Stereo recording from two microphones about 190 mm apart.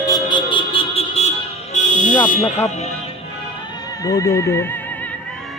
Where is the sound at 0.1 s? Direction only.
25° left (ahead or behind).